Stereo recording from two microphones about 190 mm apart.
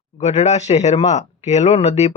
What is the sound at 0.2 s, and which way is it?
Speech, 35° left (ahead or behind).